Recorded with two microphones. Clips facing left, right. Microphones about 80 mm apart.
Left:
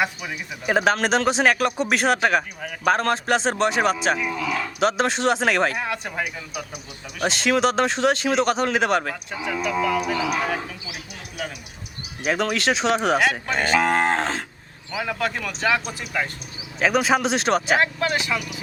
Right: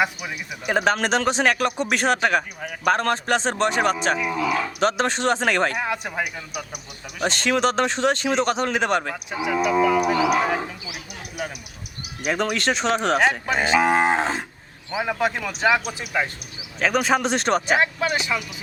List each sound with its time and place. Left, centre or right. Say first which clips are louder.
0.0 s a man's voice: right 1 dB; centre
4.0 s cattle: right 1 dB; centre
4.5 s a man's voice: left 3 dB; centre
7.2 s a man's voice: left 1 dB; centre
9.3 s cattle: right 5 dB; centre
12.2 s a man's voice: left 1 dB; centre
13.5 s cattle: right 1 dB; centre
14.8 s a man's voice: right 2 dB; right
15.1 s cattle: right 2 dB; centre
16.8 s a man's voice: left 1 dB; centre
18.0 s cattle: even; centre